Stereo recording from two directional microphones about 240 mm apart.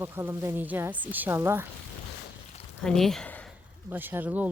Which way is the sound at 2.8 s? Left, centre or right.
Centre.